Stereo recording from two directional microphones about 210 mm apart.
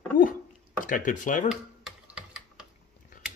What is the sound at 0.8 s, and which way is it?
Speech, 40° left (ahead or behind).